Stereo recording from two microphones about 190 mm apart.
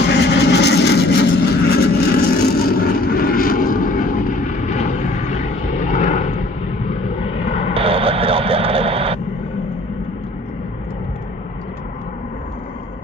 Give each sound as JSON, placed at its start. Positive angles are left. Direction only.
{"t": 0.1, "sound": "vehicle", "side_deg": 60}
{"t": 7.7, "sound": "radio", "side_deg": -30}